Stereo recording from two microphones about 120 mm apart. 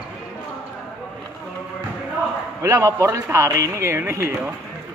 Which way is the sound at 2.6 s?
25° right (ahead or behind).